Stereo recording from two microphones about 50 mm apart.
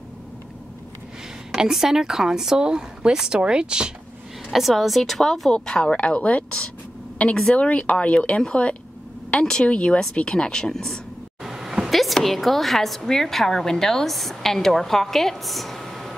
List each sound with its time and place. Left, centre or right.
1.5 s a woman's voice: centre
4.5 s a woman's voice: centre
11.4 s a sound: centre
11.9 s a woman's voice: centre